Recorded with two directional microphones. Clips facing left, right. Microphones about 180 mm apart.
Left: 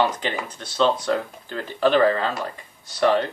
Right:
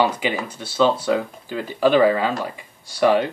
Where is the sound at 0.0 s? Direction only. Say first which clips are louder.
Right 2 dB; 10° right (ahead or behind).